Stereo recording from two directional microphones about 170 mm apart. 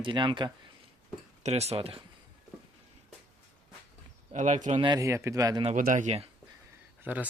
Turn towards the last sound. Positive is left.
turn(degrees=-10)  # may be behind; listen again after turning